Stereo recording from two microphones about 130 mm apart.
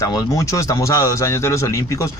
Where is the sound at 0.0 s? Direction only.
25° left (ahead or behind).